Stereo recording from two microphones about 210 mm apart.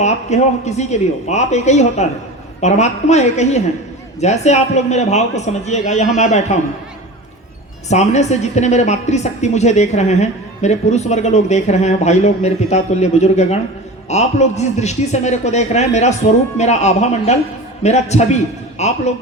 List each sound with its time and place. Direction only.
0.0 s a woman's voice: 35° left (ahead or behind)
7.9 s a woman's voice: 30° left (ahead or behind)